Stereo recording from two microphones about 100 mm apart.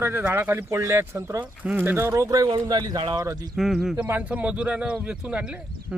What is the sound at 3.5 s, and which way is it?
Speech, 5° right (ahead or behind).